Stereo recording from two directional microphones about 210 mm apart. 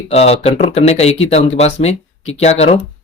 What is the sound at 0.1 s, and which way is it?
Speech, 30° left (ahead or behind).